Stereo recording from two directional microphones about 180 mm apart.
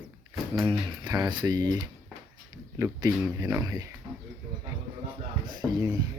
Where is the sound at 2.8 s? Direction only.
15° right (ahead or behind).